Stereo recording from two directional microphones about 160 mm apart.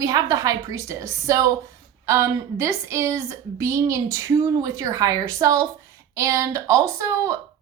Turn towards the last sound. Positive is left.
turn(degrees=-20)  # may be behind; listen again after turning